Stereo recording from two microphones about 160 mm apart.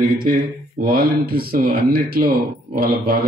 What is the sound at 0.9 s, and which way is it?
Speech, 70° right (ahead or behind).